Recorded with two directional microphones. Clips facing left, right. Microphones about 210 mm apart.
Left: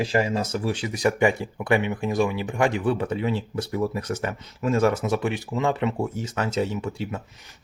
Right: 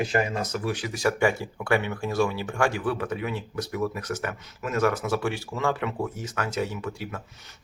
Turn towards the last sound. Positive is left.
turn(degrees=25)  # may be behind; listen again after turning